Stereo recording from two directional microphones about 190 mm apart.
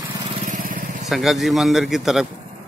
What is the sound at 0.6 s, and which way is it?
Vehicle, 45° right (ahead or behind).